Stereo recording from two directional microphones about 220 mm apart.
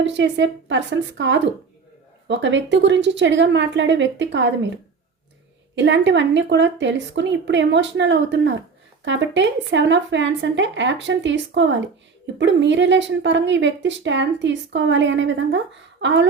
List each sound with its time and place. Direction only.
0.0 s speech: 55° right (ahead or behind)
5.7 s speech: 55° right (ahead or behind)